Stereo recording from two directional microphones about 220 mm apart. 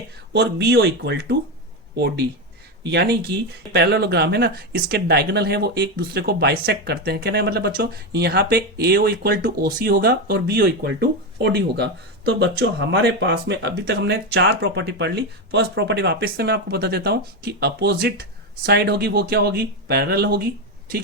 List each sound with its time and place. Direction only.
0.3 s speech: 50° right (ahead or behind)